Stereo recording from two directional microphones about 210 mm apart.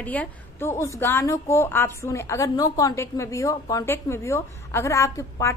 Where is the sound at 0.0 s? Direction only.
5° left (ahead or behind).